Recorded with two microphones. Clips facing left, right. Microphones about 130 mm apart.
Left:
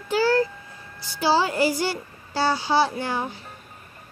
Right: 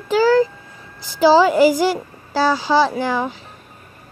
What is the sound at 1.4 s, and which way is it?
A child's voice, 90° right.